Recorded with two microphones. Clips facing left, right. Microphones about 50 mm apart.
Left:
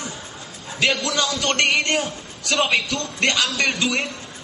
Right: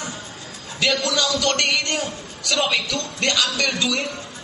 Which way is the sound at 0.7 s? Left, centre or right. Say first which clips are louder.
Even; left.